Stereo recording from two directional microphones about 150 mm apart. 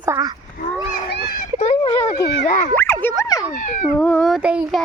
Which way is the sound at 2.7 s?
15° left (ahead or behind).